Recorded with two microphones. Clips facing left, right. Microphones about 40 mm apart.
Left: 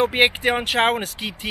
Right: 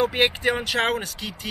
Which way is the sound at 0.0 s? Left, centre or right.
Left.